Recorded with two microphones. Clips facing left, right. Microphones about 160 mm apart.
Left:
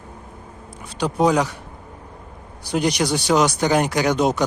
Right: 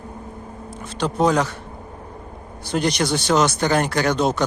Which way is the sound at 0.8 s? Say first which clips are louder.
Left 1 dB; 10° left (ahead or behind).